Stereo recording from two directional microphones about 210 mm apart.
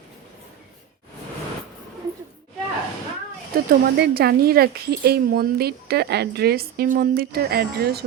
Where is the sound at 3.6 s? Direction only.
50° right (ahead or behind).